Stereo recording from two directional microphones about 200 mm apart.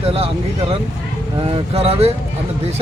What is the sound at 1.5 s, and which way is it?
Speech, 30° right (ahead or behind).